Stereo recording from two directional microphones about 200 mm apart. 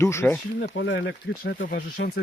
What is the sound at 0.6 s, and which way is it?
Speech, 55° left (ahead or behind).